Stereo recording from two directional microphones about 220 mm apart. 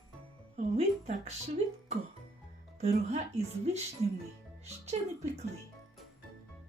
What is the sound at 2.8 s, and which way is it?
Speech, 30° right (ahead or behind).